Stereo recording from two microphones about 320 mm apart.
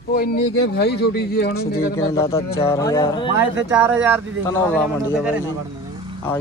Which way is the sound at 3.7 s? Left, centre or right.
Centre.